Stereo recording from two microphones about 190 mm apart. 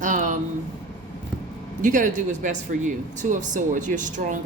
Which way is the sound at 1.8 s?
40° right (ahead or behind).